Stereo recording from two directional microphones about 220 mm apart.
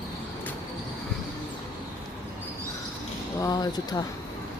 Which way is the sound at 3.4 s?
15° left (ahead or behind).